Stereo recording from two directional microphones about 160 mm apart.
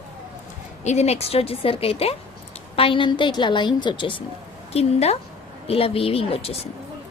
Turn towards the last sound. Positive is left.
turn(degrees=35)  # may be behind; listen again after turning